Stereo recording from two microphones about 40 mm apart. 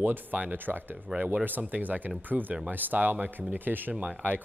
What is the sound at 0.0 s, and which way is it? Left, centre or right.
Speech, right.